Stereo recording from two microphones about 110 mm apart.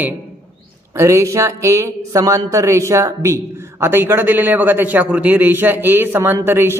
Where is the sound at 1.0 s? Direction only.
25° right (ahead or behind).